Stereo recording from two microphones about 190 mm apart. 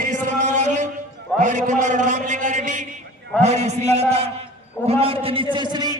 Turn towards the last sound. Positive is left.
turn(degrees=-20)  # may be behind; listen again after turning